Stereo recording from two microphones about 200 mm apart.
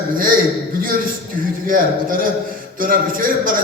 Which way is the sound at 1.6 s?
45° right (ahead or behind).